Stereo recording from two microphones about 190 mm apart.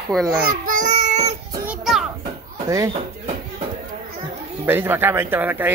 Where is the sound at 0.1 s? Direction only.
Centre (ahead or behind).